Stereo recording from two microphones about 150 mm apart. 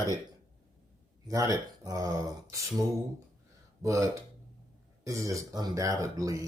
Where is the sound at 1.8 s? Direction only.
25° right (ahead or behind).